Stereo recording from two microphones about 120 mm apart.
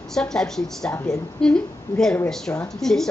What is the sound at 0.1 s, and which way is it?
Speech, 5° left (ahead or behind).